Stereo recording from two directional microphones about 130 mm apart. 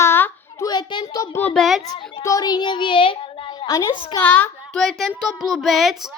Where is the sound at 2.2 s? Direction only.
30° left (ahead or behind).